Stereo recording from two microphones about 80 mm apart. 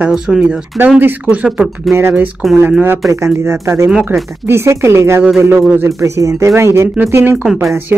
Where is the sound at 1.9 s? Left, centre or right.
Right.